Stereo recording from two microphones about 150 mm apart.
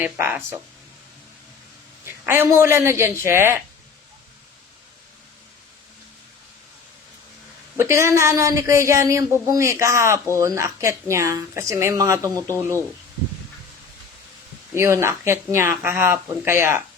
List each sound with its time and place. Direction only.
0.0 s speech: 15° right (ahead or behind)
2.0 s speech: 15° right (ahead or behind)
7.8 s speech: 20° right (ahead or behind)
14.8 s speech: 20° right (ahead or behind)